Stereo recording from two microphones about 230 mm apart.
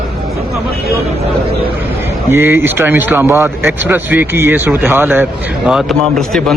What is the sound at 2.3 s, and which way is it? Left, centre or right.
A man's voice, centre.